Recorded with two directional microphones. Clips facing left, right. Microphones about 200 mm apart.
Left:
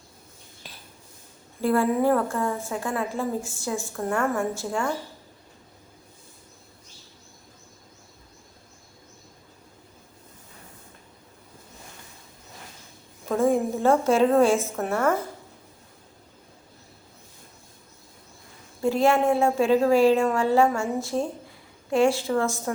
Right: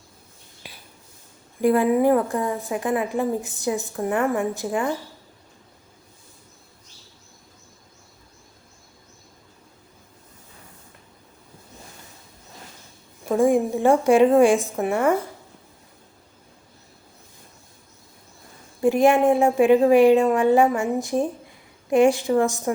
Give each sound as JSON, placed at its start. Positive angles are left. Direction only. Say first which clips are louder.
{"t": 0.7, "sound": "a sound", "louder": "right 3 dB", "side_deg": -10}
{"t": 1.6, "sound": "a woman's voice", "louder": "right 4 dB", "side_deg": -15}
{"t": 13.2, "sound": "a woman's voice", "louder": "right 3 dB", "side_deg": -15}
{"t": 18.8, "sound": "a woman's voice", "louder": "right 4 dB", "side_deg": -15}